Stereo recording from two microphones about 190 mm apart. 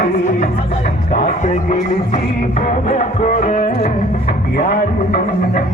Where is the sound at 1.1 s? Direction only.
35° left (ahead or behind).